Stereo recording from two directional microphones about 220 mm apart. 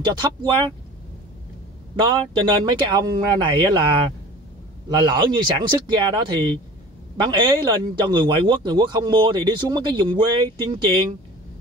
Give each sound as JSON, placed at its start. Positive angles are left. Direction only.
{"t": 0.0, "sound": "a man's voice", "side_deg": -20}
{"t": 2.3, "sound": "a man's voice", "side_deg": -20}